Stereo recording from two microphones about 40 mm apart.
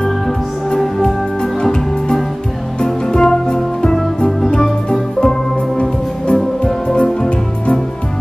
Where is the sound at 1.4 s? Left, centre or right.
Centre.